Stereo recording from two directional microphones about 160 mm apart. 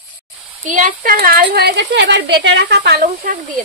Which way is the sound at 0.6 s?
55° right (ahead or behind).